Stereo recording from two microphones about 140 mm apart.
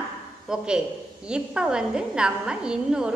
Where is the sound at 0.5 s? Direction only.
5° right (ahead or behind).